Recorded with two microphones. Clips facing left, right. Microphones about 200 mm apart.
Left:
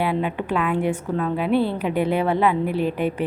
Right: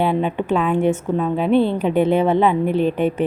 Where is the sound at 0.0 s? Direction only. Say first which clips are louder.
Right 4 dB; 25° right (ahead or behind).